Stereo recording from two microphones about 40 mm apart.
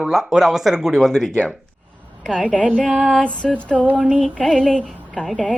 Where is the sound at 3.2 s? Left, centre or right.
Left.